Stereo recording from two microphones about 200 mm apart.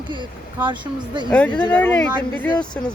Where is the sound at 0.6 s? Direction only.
20° right (ahead or behind).